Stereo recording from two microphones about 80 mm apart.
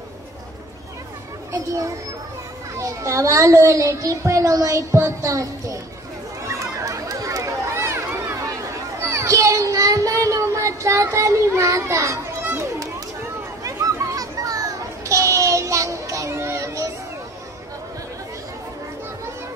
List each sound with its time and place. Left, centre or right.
2.7 s a child's voice: right
6.4 s a sound: right
9.0 s child singing: right
13.7 s children playing: right